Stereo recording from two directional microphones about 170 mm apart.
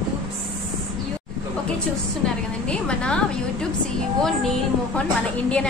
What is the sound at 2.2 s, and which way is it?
A woman's voice, 5° left (ahead or behind).